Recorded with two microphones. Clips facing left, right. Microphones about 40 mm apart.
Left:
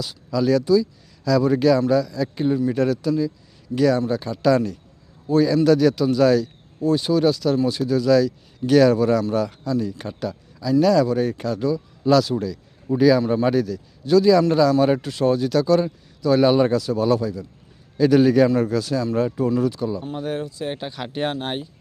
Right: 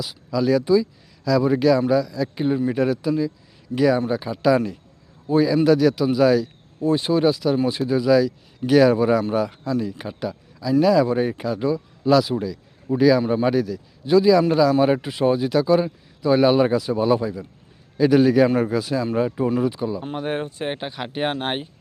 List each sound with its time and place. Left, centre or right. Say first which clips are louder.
0.0 s speech: even; centre
0.6 s speech: even; right
1.2 s a man's voice: even; centre
6.8 s a man's voice: even; right; by 18.4 s centre
18.6 s speech: even; centre
20.0 s speech: right 1 dB; right
20.7 s speech: even; right
21.3 s speech: right 2 dB; right